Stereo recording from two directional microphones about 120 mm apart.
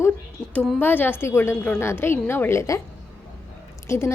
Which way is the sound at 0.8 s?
15° left (ahead or behind).